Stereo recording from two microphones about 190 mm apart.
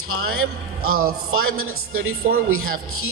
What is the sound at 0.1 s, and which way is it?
Speech, 90° right.